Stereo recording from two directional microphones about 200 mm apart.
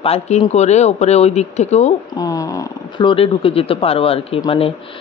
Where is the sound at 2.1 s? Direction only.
15° left (ahead or behind).